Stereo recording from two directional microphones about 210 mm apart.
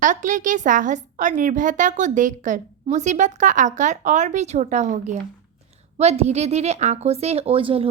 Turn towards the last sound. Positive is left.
turn(degrees=-25)  # may be behind; listen again after turning